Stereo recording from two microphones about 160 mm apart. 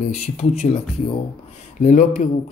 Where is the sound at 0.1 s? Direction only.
45° left (ahead or behind).